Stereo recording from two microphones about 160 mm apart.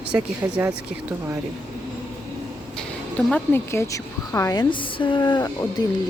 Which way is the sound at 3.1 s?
10° left (ahead or behind).